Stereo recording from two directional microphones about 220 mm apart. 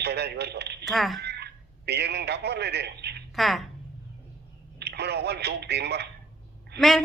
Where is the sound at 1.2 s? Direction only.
50° right (ahead or behind).